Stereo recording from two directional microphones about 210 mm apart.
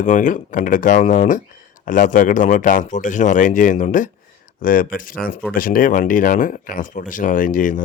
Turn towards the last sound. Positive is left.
turn(degrees=40)  # may be behind; listen again after turning